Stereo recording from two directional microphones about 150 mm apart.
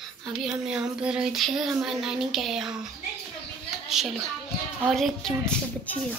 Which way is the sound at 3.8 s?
Centre (ahead or behind).